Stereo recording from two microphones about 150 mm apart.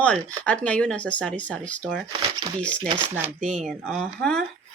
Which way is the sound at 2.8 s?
30° right (ahead or behind).